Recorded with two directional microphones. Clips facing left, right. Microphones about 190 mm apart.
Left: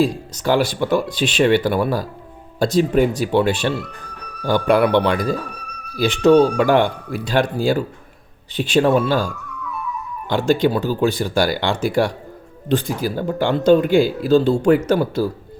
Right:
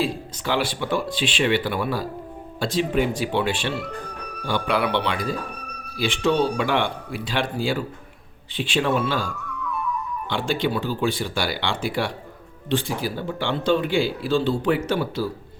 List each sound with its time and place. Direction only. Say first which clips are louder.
0.3 s speech: left 8 dB; 45° left (ahead or behind)